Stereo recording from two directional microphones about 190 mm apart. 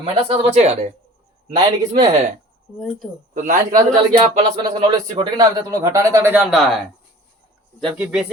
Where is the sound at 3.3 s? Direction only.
45° right (ahead or behind).